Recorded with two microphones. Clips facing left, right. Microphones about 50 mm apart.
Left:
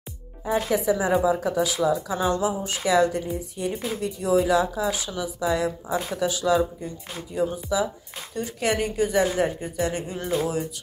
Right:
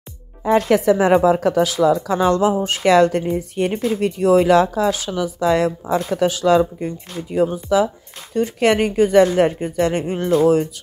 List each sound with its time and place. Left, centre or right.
0.5 s speech: right
6.1 s speech: right